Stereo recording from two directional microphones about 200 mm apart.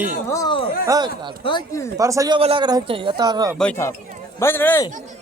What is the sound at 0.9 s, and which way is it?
Speech, 20° right (ahead or behind).